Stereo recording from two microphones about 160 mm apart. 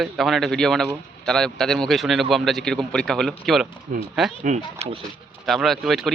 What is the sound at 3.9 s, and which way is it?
Speech, 60° right (ahead or behind).